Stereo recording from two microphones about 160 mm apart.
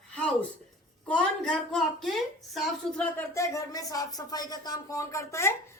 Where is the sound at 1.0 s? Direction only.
5° left (ahead or behind).